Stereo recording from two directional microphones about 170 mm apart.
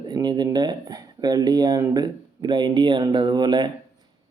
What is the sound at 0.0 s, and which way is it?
Speech, 25° right (ahead or behind).